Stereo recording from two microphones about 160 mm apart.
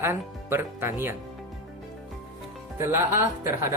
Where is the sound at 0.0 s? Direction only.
15° right (ahead or behind).